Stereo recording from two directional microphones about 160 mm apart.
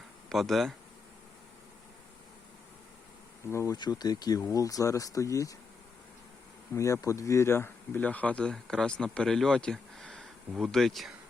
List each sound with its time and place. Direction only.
0.3 s speech: centre (ahead or behind)
3.5 s speech: 20° left (ahead or behind)
6.7 s speech: 20° left (ahead or behind); by 11.1 s centre (ahead or behind)